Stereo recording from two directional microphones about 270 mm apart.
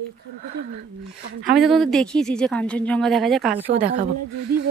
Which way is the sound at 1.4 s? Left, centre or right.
Centre.